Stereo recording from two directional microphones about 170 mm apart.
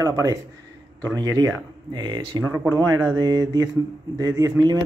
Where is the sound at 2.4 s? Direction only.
15° right (ahead or behind).